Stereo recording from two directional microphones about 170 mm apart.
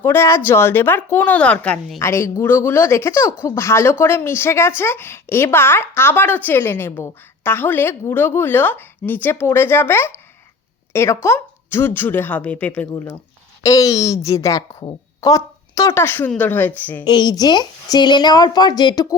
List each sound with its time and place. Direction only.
0.0 s a woman's voice: 15° left (ahead or behind)
13.6 s a woman's voice: 20° left (ahead or behind)
17.0 s a woman's voice: 25° left (ahead or behind)